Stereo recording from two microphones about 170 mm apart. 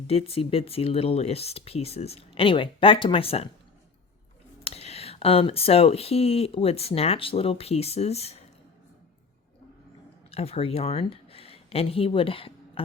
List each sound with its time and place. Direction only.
0.1 s speech: 35° left (ahead or behind)
4.6 s speech: 35° left (ahead or behind)
10.3 s speech: 35° left (ahead or behind)